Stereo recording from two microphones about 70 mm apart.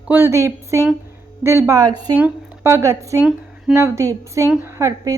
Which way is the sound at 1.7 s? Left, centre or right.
Right.